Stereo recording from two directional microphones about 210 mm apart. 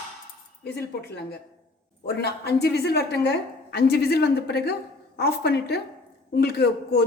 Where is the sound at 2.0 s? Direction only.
50° left (ahead or behind).